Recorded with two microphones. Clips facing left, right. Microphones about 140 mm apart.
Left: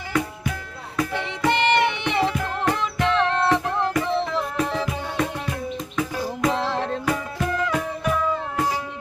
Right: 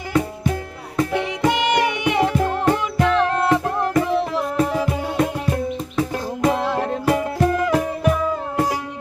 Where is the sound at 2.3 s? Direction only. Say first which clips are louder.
Right 6 dB; 35° right (ahead or behind).